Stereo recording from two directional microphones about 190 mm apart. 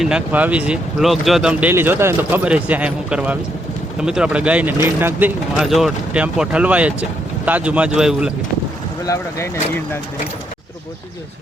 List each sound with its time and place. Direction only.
0.0 s speech: 5° right (ahead or behind)
5.5 s speech: centre (ahead or behind)
9.0 s speech: 15° left (ahead or behind)